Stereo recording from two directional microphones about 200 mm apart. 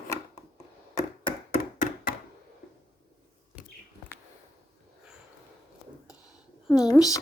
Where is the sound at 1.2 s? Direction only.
35° left (ahead or behind).